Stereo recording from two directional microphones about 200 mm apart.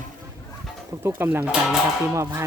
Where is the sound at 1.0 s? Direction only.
10° right (ahead or behind).